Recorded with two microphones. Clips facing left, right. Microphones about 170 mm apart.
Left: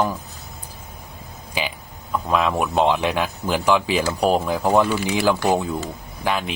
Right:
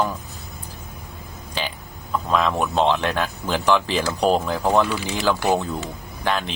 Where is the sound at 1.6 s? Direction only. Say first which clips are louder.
Left 2 dB; 10° left (ahead or behind).